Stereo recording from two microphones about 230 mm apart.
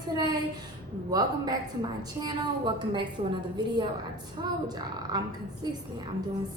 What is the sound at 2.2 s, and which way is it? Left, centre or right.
Speech, centre.